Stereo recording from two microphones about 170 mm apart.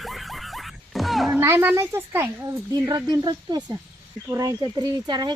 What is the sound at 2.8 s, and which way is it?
Speech, 25° right (ahead or behind).